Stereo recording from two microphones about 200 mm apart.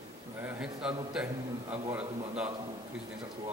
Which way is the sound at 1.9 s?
5° right (ahead or behind).